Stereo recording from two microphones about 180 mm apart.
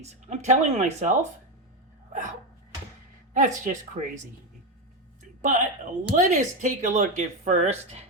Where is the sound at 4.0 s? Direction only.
35° right (ahead or behind).